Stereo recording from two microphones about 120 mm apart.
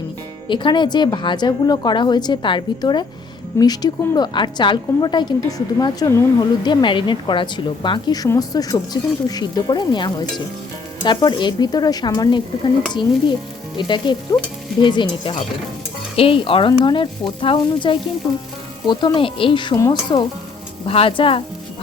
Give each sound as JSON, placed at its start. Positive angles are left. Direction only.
{"t": 0.4, "sound": "a woman's voice", "side_deg": 40}
{"t": 6.4, "sound": "a woman's voice", "side_deg": 40}
{"t": 20.8, "sound": "speech", "side_deg": 50}